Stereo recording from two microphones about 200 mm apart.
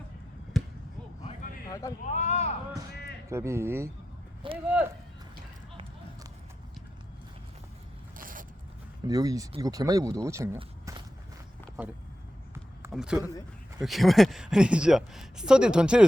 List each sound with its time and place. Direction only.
0.5 s basketball bounce: centre (ahead or behind)
2.1 s a sound: 35° left (ahead or behind)
3.2 s speech: 15° right (ahead or behind)
4.4 s speech: 25° right (ahead or behind)
8.1 s zipper: 45° right (ahead or behind)
9.0 s speech: 15° right (ahead or behind)
12.9 s speech: centre (ahead or behind)